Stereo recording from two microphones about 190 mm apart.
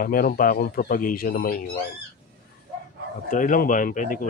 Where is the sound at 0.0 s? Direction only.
50° left (ahead or behind).